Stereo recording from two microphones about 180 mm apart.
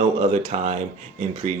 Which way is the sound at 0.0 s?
35° right (ahead or behind).